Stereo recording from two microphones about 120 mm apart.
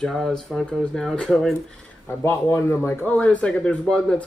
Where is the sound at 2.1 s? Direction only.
20° left (ahead or behind).